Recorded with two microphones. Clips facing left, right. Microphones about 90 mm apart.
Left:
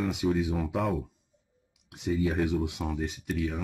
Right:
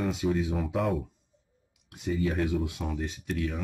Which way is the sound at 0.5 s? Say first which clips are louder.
Right 1 dB; centre (ahead or behind).